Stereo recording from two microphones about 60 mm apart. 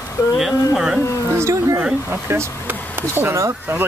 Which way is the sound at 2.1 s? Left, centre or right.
Right.